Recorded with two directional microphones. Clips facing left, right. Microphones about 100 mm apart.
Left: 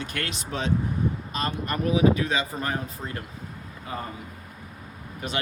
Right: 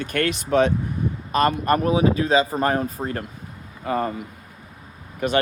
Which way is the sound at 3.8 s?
90° right.